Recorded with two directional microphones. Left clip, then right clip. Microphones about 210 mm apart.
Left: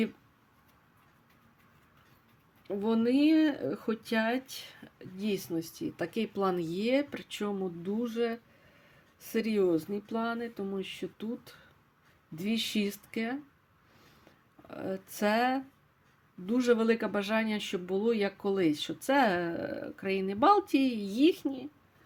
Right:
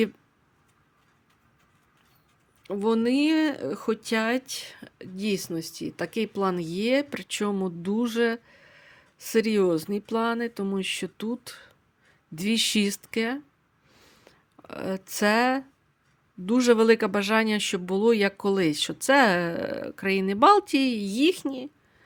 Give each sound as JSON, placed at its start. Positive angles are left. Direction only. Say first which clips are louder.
{"t": 2.6, "sound": "speech", "louder": "right 5 dB", "side_deg": -30}
{"t": 13.9, "sound": "a sound", "louder": "right 5 dB", "side_deg": -35}
{"t": 16.5, "sound": "speech", "louder": "right 7 dB", "side_deg": -35}